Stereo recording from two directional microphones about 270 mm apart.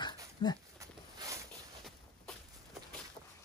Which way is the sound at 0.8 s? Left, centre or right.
Centre.